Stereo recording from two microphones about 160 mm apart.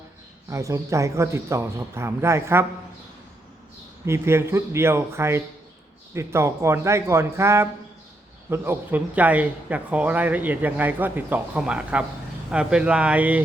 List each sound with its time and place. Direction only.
0.5 s speech: 20° right (ahead or behind)
4.0 s speech: 15° right (ahead or behind)